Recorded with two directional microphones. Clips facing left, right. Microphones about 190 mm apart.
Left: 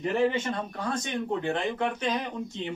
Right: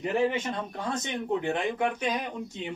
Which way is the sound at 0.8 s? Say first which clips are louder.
Left 1 dB; 20° right (ahead or behind).